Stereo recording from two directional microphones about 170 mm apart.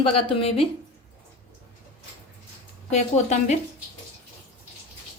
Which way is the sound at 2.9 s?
40° left (ahead or behind).